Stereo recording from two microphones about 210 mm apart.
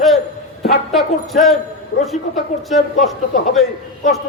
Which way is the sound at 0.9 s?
Centre (ahead or behind).